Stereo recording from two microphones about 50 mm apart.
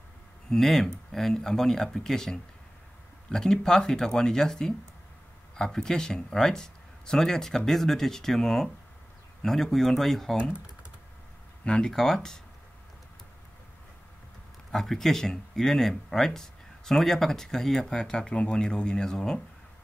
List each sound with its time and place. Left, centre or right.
0.5 s speech: centre
11.6 s speech: centre
14.7 s speech: centre